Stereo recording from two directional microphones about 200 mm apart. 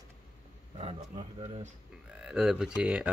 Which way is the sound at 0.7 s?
30° right (ahead or behind).